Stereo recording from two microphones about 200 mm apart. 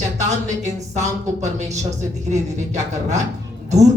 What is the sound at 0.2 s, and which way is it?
Speech, 35° right (ahead or behind).